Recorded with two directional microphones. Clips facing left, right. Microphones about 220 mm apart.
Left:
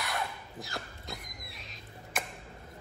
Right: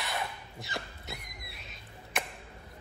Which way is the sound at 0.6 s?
Centre (ahead or behind).